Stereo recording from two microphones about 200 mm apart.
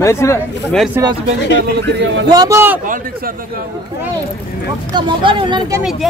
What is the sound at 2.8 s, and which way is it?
Speech, 40° right (ahead or behind).